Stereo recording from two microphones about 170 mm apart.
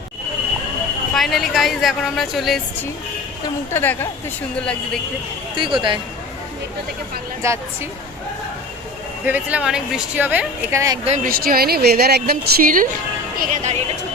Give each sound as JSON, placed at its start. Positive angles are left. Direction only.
{"t": 1.1, "sound": "a woman's voice", "side_deg": 0}
{"t": 3.4, "sound": "a woman's voice", "side_deg": 15}
{"t": 5.5, "sound": "speech", "side_deg": -30}
{"t": 7.4, "sound": "speech", "side_deg": -15}
{"t": 9.2, "sound": "speech", "side_deg": -10}
{"t": 11.0, "sound": "speech", "side_deg": -40}
{"t": 11.3, "sound": "a woman's voice", "side_deg": -60}